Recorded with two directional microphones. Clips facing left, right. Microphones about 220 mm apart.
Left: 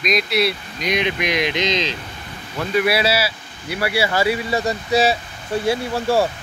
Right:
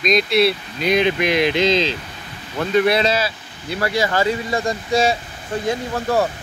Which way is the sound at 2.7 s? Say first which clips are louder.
Right 2 dB; 5° left (ahead or behind).